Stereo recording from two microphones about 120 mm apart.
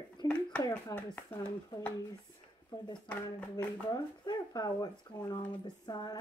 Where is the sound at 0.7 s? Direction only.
15° left (ahead or behind).